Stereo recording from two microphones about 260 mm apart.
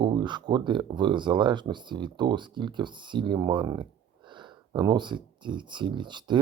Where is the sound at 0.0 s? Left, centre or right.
Centre.